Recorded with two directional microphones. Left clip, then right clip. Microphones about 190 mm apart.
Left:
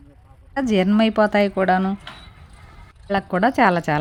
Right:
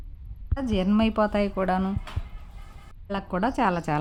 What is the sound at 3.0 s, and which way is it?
Speech, 15° left (ahead or behind).